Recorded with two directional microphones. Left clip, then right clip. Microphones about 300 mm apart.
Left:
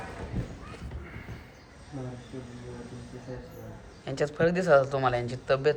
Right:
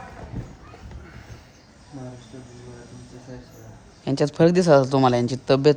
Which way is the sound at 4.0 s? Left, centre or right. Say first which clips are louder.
Right 7 dB; right.